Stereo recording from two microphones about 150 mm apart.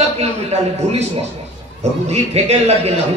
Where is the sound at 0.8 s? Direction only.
50° right (ahead or behind).